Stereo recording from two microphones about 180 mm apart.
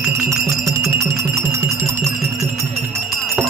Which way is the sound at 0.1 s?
15° right (ahead or behind).